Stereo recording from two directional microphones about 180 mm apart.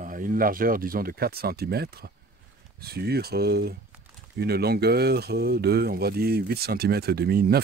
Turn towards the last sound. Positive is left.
turn(degrees=-60)  # may be behind; listen again after turning